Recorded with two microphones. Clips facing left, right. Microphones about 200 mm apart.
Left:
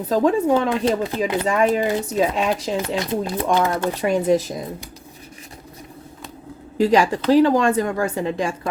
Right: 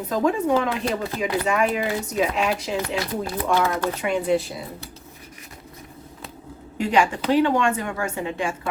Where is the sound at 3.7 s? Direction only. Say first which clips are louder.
Left 3 dB; 35° left (ahead or behind).